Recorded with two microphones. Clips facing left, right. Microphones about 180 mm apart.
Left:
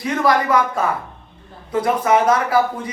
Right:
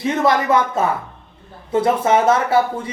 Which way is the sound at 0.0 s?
25° right (ahead or behind).